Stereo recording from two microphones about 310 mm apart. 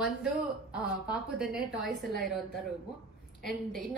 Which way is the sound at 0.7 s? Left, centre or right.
Centre.